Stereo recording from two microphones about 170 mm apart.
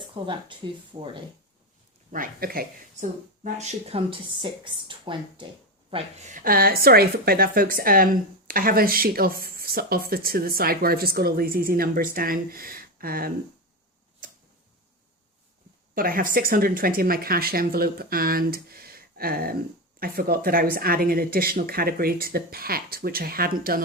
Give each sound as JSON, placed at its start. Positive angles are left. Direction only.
{"t": 0.1, "sound": "speech", "side_deg": -30}
{"t": 2.1, "sound": "speech", "side_deg": -55}
{"t": 6.2, "sound": "speech", "side_deg": -55}
{"t": 16.0, "sound": "speech", "side_deg": -55}